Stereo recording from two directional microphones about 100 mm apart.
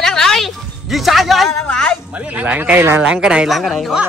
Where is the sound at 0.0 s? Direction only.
5° left (ahead or behind).